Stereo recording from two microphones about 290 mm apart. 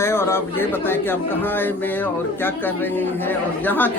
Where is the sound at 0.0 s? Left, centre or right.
Centre.